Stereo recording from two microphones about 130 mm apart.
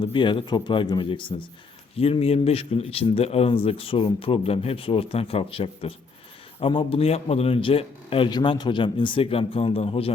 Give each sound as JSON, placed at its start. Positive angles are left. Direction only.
{"t": 0.0, "sound": "a man's voice", "side_deg": 40}